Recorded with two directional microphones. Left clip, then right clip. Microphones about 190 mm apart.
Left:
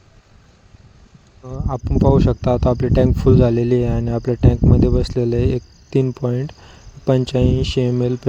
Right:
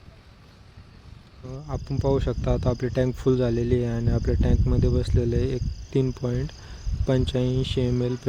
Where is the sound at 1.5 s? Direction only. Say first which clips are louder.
Left 9 dB; 25° left (ahead or behind).